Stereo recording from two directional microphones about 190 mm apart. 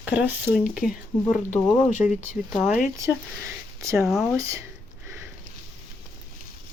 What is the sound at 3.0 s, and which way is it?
Speech, 15° right (ahead or behind).